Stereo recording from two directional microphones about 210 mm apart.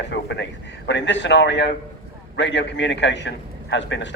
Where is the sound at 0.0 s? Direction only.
55° left (ahead or behind).